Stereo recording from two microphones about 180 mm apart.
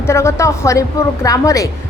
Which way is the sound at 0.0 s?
15° left (ahead or behind).